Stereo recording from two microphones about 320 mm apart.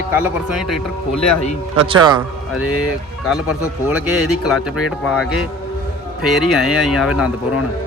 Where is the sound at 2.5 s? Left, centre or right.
Left.